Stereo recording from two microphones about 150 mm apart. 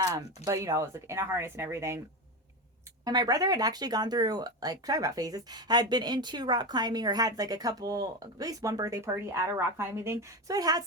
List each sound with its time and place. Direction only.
0.0 s speech: 25° right (ahead or behind)
3.0 s speech: 25° right (ahead or behind)